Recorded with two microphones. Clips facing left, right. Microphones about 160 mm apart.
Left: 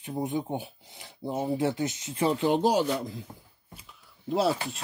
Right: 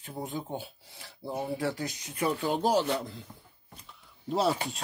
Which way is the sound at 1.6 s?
20° left (ahead or behind).